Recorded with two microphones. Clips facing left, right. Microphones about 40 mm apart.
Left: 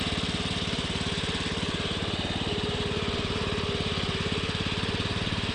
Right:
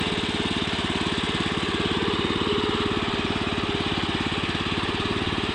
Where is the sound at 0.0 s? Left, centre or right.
Right.